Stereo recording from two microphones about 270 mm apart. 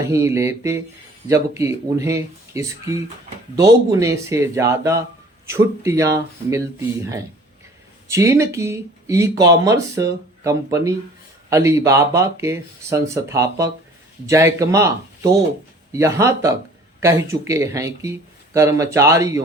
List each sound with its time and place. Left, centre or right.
0.0 s speech: centre